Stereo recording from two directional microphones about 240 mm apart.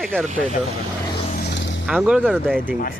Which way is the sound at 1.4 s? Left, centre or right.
Left.